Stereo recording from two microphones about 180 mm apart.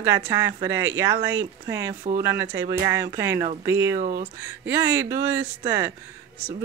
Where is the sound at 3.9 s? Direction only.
45° right (ahead or behind).